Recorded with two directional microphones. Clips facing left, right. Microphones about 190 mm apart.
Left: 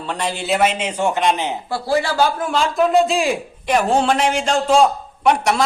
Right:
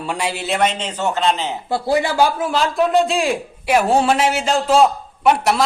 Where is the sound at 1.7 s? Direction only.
20° right (ahead or behind).